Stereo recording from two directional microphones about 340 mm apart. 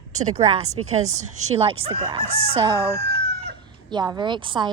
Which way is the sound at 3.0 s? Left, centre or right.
Right.